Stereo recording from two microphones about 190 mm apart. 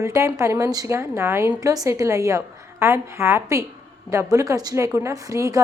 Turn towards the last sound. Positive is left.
turn(degrees=-15)  # may be behind; listen again after turning